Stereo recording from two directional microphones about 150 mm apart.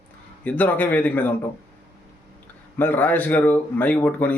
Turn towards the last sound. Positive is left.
turn(degrees=10)  # may be behind; listen again after turning